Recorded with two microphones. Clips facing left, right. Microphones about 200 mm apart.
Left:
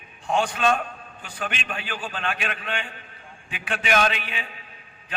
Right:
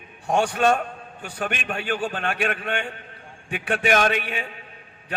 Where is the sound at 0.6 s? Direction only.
50° right (ahead or behind).